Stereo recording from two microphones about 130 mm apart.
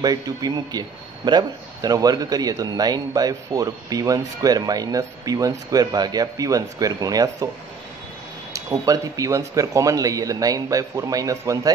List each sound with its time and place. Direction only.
0.0 s a man's voice: 30° right (ahead or behind)
8.5 s a man's voice: 25° right (ahead or behind)